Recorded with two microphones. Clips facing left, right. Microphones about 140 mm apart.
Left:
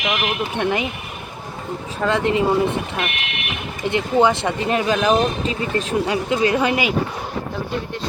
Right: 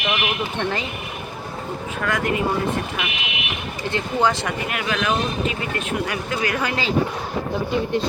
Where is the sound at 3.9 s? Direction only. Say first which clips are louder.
Left 4 dB; 20° left (ahead or behind).